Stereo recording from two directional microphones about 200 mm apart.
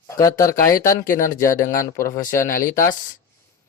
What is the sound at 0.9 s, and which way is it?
Speech, 40° left (ahead or behind).